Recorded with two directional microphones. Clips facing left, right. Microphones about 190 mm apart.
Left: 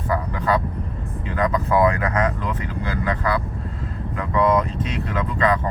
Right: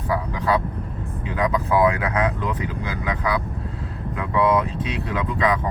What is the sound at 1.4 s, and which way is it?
Speech, centre (ahead or behind).